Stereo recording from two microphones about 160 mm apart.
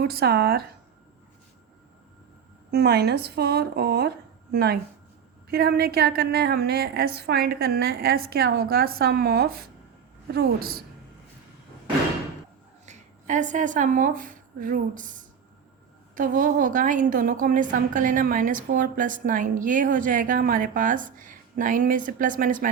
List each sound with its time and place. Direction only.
0.1 s a woman's voice: 75° right (ahead or behind)
2.7 s a woman's voice: 85° right
12.8 s a woman's voice: 50° right (ahead or behind)